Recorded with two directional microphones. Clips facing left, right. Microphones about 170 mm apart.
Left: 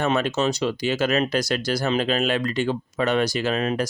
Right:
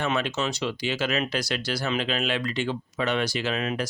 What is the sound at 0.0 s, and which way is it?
Speech, 40° left (ahead or behind).